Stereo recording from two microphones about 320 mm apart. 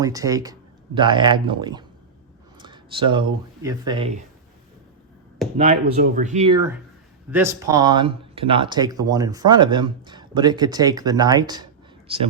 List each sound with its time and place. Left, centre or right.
0.0 s speech: centre
5.5 s speech: right